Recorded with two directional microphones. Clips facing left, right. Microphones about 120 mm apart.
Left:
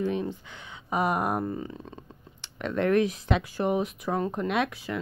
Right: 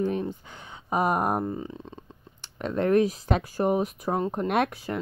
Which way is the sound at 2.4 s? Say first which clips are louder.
Right 1 dB; 35° right (ahead or behind).